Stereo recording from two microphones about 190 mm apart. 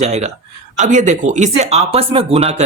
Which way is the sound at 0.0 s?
35° right (ahead or behind).